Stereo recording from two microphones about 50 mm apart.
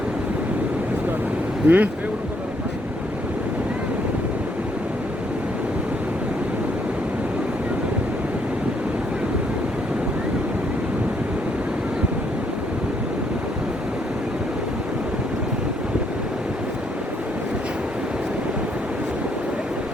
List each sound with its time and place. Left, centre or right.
1.6 s speech: right